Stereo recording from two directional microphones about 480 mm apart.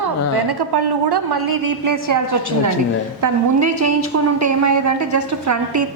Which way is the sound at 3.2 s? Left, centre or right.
Right.